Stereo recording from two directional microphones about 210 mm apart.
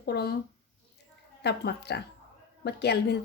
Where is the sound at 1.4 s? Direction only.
50° left (ahead or behind).